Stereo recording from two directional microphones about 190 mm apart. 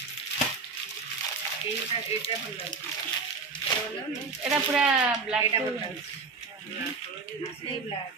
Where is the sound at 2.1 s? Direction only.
35° left (ahead or behind).